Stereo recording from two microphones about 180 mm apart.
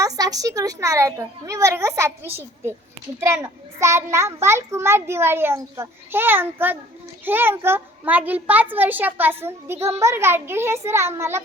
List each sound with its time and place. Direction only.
0.0 s a child's voice: 20° right (ahead or behind)
9.7 s a child's voice: 35° right (ahead or behind)
10.0 s a child's voice: 15° right (ahead or behind)